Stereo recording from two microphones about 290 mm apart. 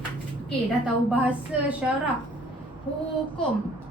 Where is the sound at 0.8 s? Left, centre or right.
Centre.